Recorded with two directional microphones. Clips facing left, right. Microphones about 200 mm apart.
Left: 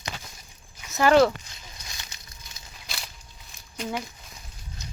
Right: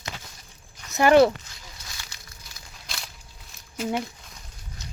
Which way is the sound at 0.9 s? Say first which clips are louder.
Right 2 dB; 15° right (ahead or behind).